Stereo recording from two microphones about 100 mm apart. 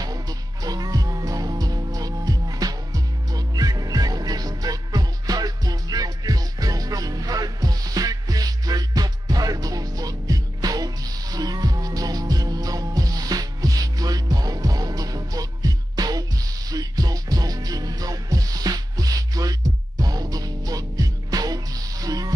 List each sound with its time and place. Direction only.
0.0 s music: 40° right (ahead or behind)